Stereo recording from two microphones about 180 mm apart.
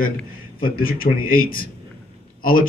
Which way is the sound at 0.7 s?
55° left (ahead or behind).